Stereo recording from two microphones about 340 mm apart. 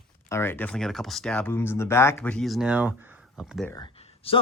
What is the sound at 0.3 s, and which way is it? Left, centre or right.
Speech, centre.